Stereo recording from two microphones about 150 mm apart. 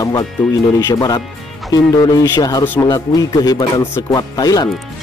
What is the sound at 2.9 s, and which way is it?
Speech, 25° left (ahead or behind).